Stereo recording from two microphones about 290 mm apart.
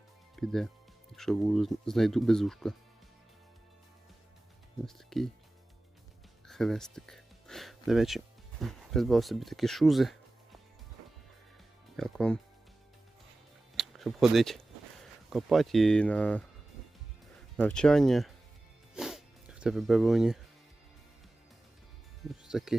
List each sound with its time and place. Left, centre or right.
0.3 s speech: centre
5.1 s speech: centre
6.5 s speech: centre
11.9 s speech: centre
13.7 s speech: centre
17.6 s speech: centre
18.9 s zipper: centre
22.3 s speech: centre